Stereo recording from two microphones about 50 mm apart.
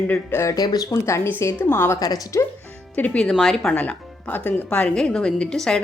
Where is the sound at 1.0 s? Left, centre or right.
Left.